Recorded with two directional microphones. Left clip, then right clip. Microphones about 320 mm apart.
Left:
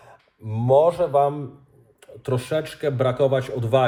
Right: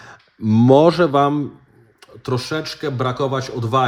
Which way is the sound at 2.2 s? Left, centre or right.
Centre.